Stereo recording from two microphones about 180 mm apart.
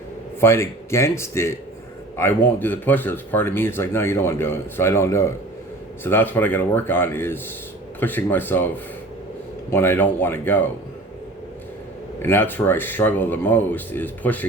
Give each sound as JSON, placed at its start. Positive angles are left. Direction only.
{"t": 0.3, "sound": "speech", "side_deg": 15}
{"t": 9.7, "sound": "speech", "side_deg": 15}
{"t": 12.2, "sound": "speech", "side_deg": 10}